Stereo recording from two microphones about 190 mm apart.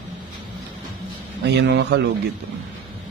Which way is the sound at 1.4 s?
65° right (ahead or behind).